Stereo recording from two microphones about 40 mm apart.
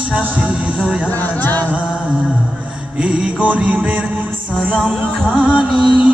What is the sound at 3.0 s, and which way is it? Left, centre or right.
Music, right.